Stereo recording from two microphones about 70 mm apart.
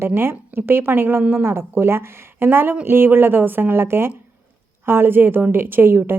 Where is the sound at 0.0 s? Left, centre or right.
Right.